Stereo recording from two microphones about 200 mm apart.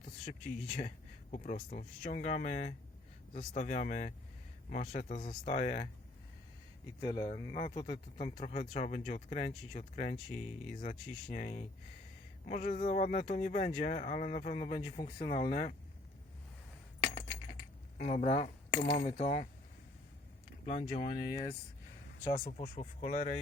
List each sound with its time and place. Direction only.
0.0 s speech: 40° left (ahead or behind)
7.0 s speech: 25° left (ahead or behind); by 10.2 s 40° left (ahead or behind)
11.3 s speech: 35° left (ahead or behind)
15.3 s speech: 45° left (ahead or behind)
17.9 s speech: 35° left (ahead or behind)
20.7 s speech: 35° left (ahead or behind)